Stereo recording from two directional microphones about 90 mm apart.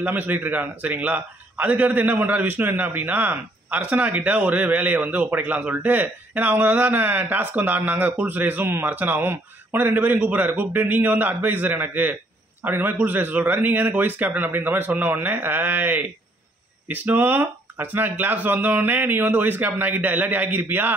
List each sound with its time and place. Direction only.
0.0 s a man's voice: 15° right (ahead or behind)